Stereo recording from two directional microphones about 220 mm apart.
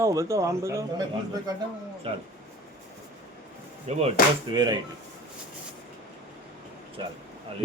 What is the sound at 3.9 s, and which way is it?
Speech, 30° right (ahead or behind).